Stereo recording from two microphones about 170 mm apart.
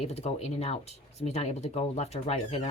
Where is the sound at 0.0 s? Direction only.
40° left (ahead or behind).